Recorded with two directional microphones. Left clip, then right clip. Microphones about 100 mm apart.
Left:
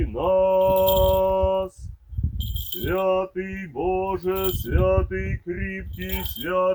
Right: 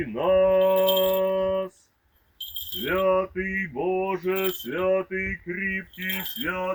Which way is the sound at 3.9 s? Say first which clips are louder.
Left 3 dB; 30° right (ahead or behind).